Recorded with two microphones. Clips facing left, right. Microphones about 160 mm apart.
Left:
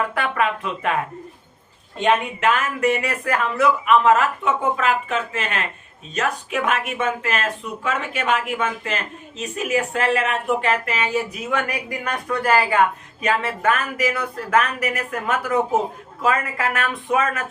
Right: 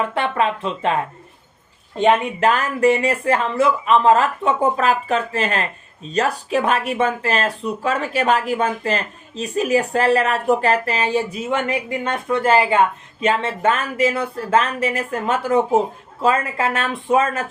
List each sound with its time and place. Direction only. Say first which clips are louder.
0.0 s speech: right 2 dB; 25° right (ahead or behind)